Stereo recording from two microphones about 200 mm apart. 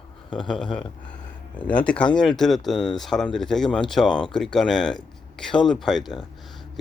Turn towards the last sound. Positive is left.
turn(degrees=0)  # may be behind; listen again after turning